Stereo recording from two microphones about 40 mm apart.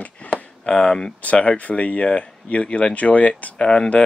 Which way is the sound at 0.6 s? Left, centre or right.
Centre.